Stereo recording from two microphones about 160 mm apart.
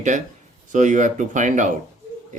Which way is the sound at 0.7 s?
50° right (ahead or behind).